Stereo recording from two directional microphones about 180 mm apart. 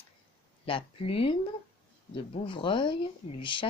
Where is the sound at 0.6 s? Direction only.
30° left (ahead or behind).